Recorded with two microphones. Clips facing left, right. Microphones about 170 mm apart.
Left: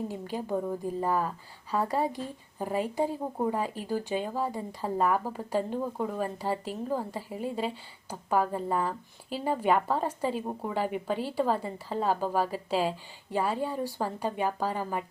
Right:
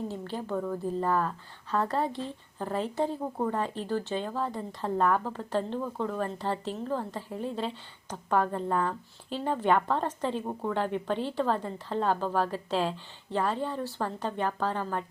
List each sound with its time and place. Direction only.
0.1 s speech: 10° left (ahead or behind)